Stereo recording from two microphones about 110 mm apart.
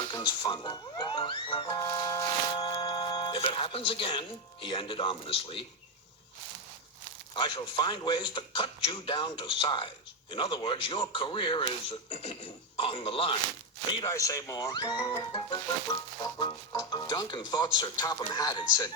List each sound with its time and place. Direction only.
0.1 s speech: 40° left (ahead or behind)
2.6 s speech: 45° left (ahead or behind)
7.3 s speech: 45° left (ahead or behind)
14.0 s speech: 30° left (ahead or behind)